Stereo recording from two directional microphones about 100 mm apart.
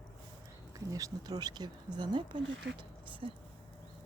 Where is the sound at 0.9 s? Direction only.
35° right (ahead or behind); by 3.3 s 50° right (ahead or behind).